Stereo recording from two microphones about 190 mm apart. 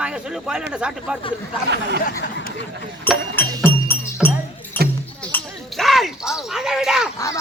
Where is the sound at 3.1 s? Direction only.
10° left (ahead or behind).